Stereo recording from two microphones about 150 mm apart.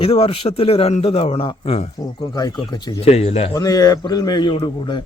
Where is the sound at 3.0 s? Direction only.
45° left (ahead or behind).